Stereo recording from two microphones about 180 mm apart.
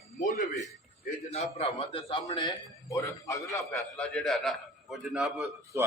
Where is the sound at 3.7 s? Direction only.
Centre (ahead or behind).